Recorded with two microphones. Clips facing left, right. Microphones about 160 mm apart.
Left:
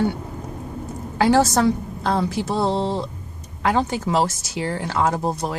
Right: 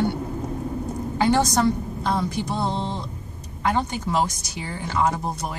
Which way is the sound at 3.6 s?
90° left.